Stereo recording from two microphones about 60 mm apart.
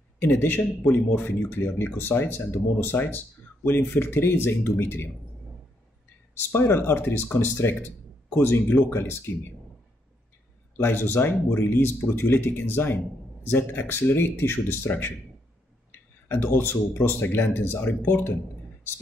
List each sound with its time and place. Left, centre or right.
0.2 s speech: left
6.3 s speech: left
10.8 s speech: left
16.3 s speech: left